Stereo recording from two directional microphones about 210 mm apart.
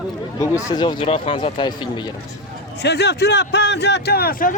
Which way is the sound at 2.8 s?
50° left (ahead or behind).